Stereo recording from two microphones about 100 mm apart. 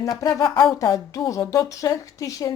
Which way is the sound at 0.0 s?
35° left (ahead or behind).